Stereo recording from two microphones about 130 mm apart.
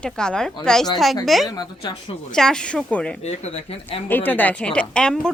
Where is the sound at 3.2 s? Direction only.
55° left (ahead or behind).